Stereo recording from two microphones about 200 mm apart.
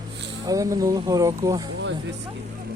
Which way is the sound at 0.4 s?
15° right (ahead or behind).